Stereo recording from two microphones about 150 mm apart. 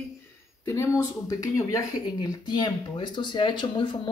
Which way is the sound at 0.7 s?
20° left (ahead or behind).